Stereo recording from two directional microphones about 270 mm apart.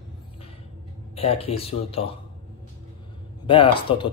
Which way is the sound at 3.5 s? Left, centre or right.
Centre.